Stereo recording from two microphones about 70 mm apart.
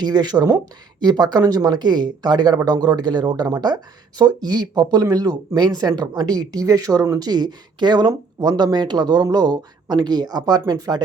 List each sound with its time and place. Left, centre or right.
0.0 s speech: right
4.4 s speech: right
5.5 s speech: right
7.2 s speech: right
8.4 s speech: right